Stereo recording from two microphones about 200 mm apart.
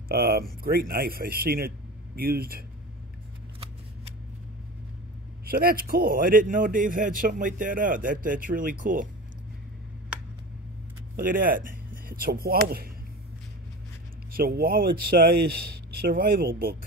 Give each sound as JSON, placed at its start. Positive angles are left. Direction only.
{"t": 0.1, "sound": "a man's voice", "side_deg": -50}
{"t": 5.4, "sound": "a man's voice", "side_deg": -50}
{"t": 11.1, "sound": "speech", "side_deg": -45}
{"t": 14.3, "sound": "a man's voice", "side_deg": -45}